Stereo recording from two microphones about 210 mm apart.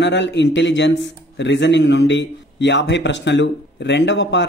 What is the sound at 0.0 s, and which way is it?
A man's voice, 60° left (ahead or behind).